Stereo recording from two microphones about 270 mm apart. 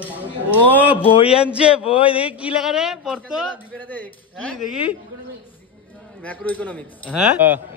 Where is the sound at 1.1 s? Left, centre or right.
Centre.